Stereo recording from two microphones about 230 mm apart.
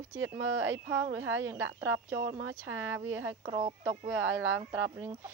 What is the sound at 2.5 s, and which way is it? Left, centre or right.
Speech, right.